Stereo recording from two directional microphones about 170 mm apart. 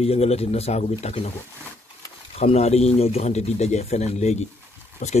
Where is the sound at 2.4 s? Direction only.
40° left (ahead or behind).